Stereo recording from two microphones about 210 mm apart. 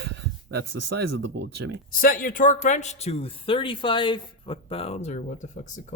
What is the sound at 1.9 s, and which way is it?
Speech, 40° left (ahead or behind).